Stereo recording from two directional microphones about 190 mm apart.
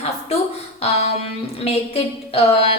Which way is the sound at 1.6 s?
30° left (ahead or behind).